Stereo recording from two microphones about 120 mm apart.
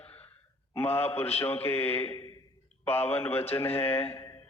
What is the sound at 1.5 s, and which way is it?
Mantra, 20° left (ahead or behind).